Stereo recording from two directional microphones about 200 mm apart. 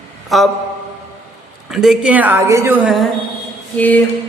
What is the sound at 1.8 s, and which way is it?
A woman's voice, 5° right (ahead or behind).